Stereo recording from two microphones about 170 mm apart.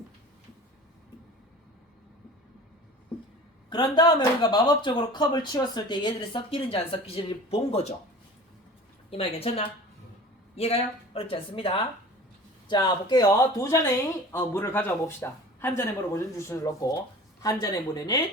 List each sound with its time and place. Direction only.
3.7 s speech: 25° left (ahead or behind)
9.0 s speech: 35° left (ahead or behind)